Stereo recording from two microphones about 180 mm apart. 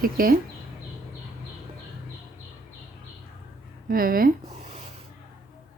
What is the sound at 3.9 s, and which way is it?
Speech, 55° right (ahead or behind).